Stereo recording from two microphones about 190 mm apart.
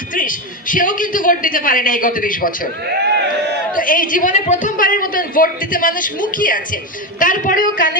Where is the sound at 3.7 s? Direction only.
45° left (ahead or behind).